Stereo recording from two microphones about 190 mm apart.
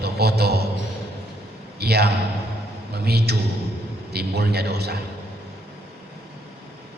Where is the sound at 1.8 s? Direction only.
55° right (ahead or behind).